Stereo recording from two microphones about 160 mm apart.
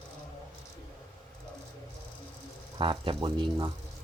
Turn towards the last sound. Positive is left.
turn(degrees=-30)  # may be behind; listen again after turning